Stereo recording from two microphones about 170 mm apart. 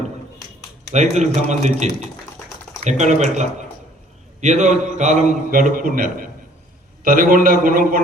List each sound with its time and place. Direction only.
0.9 s a man's voice: 45° right (ahead or behind)